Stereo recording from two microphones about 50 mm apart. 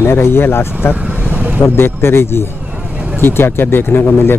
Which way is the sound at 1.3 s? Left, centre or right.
Right.